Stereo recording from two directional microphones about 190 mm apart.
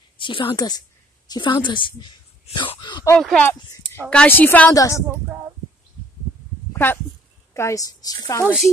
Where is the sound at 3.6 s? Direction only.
25° left (ahead or behind).